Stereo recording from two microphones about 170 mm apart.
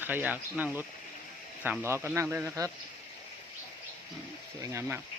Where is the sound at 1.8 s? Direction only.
15° right (ahead or behind).